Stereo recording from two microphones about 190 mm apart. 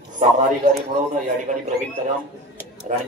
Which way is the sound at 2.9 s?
45° right (ahead or behind).